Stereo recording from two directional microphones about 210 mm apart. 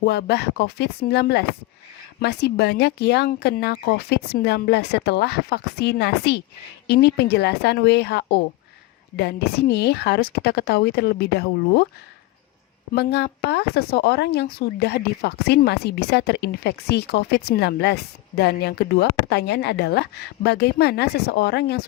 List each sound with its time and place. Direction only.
0.0 s a woman's voice: 50° left (ahead or behind)
12.9 s a woman's voice: 50° left (ahead or behind)